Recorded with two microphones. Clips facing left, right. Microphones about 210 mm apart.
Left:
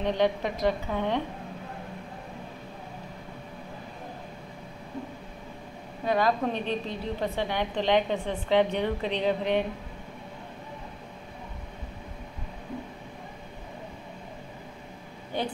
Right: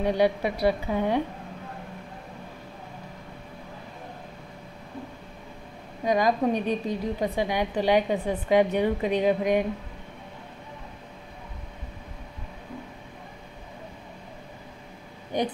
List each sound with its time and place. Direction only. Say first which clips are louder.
0.0 s a woman's voice: right 3 dB; 10° right (ahead or behind)
6.0 s a woman's voice: right 3 dB; 15° right (ahead or behind)
15.3 s a sound: right 4 dB; 15° right (ahead or behind)